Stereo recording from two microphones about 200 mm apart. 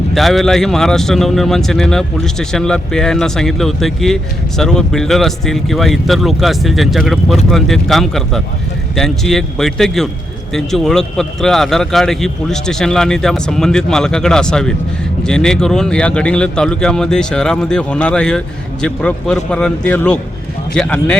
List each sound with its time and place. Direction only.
0.1 s speech: centre (ahead or behind)